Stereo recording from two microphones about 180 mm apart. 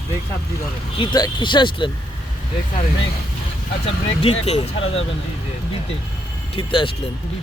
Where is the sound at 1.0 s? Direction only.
25° left (ahead or behind).